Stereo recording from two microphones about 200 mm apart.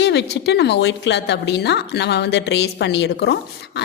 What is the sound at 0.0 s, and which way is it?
A woman's voice, 60° left (ahead or behind).